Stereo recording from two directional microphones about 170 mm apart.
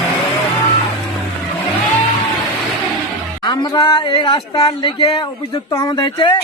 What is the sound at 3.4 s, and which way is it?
A man's voice, 25° left (ahead or behind).